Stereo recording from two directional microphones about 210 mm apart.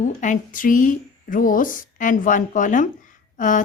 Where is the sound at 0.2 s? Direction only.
40° left (ahead or behind).